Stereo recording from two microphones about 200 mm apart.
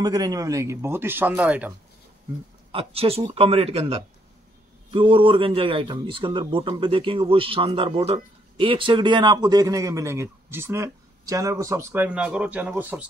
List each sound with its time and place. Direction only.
0.0 s speech: 20° right (ahead or behind)
2.7 s a man's voice: 30° right (ahead or behind); by 13.0 s 5° right (ahead or behind)